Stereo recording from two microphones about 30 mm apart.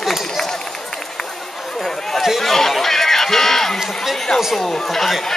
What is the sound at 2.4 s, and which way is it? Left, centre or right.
A man's voice, centre.